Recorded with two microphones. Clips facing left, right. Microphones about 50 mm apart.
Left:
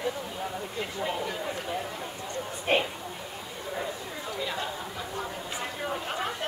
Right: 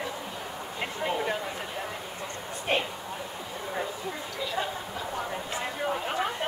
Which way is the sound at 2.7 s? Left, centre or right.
Centre.